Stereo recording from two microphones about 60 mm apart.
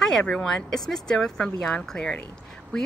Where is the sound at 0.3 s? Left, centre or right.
Centre.